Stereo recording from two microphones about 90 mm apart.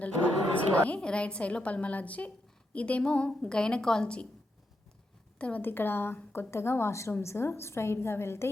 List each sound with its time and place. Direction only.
0.0 s a woman's voice: 15° left (ahead or behind)
5.4 s a woman's voice: 15° left (ahead or behind)